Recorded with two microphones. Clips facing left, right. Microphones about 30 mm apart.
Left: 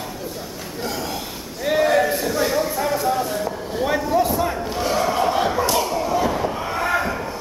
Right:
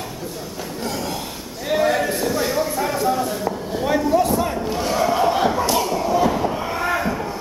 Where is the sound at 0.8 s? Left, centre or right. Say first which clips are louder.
Even; centre.